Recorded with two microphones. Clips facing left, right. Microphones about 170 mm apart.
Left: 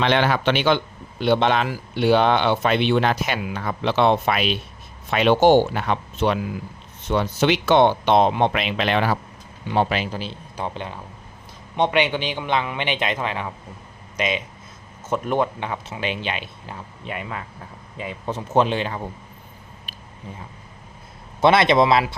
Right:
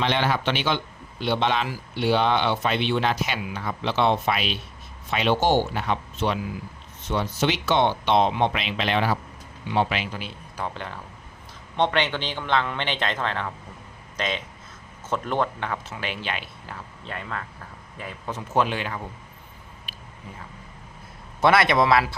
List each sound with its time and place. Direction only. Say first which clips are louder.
0.0 s speech: left 4 dB; 65° left (ahead or behind)
9.6 s a man's voice: left 3 dB; 40° left (ahead or behind)
10.8 s speech: left 3 dB; 15° left (ahead or behind)
21.4 s speech: left 3 dB; 25° left (ahead or behind)